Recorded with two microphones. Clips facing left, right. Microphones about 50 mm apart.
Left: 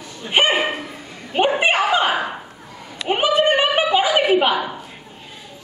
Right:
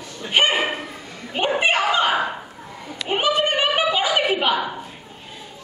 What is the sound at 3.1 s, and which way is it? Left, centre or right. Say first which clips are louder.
Speech: left 4 dB; centre.